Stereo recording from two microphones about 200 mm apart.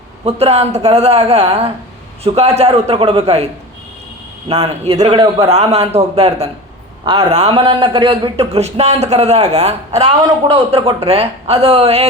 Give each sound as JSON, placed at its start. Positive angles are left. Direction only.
{"t": 0.3, "sound": "a man's voice", "side_deg": -30}
{"t": 4.4, "sound": "a man's voice", "side_deg": -30}